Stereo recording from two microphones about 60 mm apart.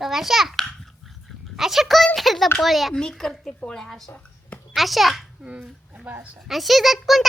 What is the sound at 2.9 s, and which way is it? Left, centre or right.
Speech, centre.